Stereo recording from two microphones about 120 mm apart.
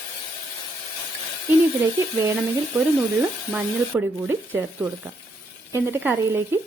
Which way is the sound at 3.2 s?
10° right (ahead or behind).